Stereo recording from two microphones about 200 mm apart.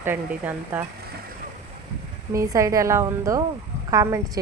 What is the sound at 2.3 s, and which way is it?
Speech, 15° right (ahead or behind).